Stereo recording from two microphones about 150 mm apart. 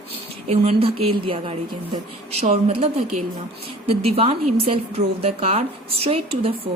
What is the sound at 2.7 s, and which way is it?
Speech, 40° right (ahead or behind).